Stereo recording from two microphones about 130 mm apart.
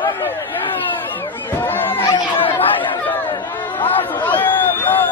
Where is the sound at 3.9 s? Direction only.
15° left (ahead or behind).